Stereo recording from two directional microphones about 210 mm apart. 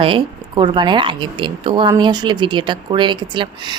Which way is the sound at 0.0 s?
25° right (ahead or behind).